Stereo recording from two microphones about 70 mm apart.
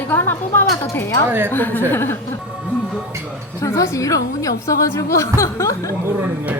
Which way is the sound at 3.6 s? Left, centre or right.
Left.